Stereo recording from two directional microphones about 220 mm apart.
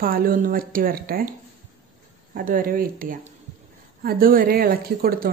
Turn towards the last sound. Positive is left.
turn(degrees=-40)  # may be behind; listen again after turning